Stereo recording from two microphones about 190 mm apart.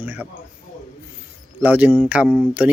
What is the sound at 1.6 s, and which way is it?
Speech, 10° right (ahead or behind).